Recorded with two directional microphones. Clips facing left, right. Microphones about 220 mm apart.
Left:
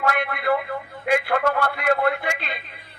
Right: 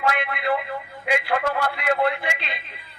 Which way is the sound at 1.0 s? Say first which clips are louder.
Left 3 dB; 50° left (ahead or behind).